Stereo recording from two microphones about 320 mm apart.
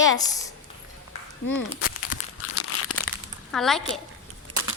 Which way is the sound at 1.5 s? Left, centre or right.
Left.